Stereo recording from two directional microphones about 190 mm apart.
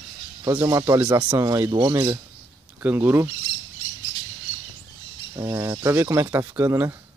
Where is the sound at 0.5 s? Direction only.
15° right (ahead or behind).